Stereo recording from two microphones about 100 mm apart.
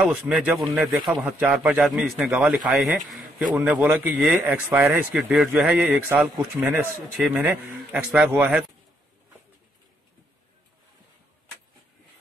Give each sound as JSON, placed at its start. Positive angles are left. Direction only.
{"t": 0.2, "sound": "speech", "side_deg": -15}
{"t": 0.6, "sound": "speech", "side_deg": 0}
{"t": 1.2, "sound": "speech", "side_deg": -15}
{"t": 1.8, "sound": "a man's voice", "side_deg": 0}
{"t": 3.5, "sound": "speech", "side_deg": -15}
{"t": 5.1, "sound": "speech", "side_deg": -5}
{"t": 7.0, "sound": "speech", "side_deg": -5}
{"t": 7.3, "sound": "speech", "side_deg": -20}